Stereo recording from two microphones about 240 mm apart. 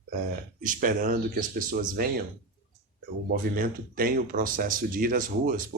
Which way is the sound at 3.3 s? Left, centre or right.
Right.